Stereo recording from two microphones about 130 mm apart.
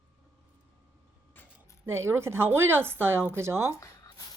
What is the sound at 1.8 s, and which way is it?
Speech, 20° right (ahead or behind).